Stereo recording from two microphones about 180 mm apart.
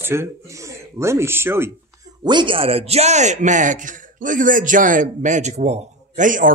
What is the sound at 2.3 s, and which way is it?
A man's voice, 25° right (ahead or behind).